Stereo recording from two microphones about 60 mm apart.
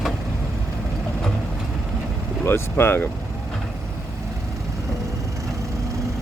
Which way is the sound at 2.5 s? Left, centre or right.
Left.